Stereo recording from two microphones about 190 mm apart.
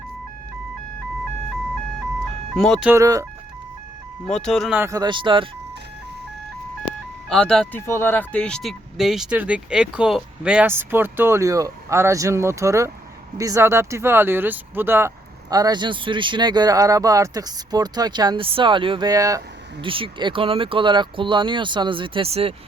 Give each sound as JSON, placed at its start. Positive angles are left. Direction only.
{"t": 2.6, "sound": "speech", "side_deg": 0}
{"t": 2.9, "sound": "speech", "side_deg": -15}
{"t": 4.3, "sound": "speech", "side_deg": 5}
{"t": 4.8, "sound": "speech", "side_deg": -20}
{"t": 7.3, "sound": "speech", "side_deg": 5}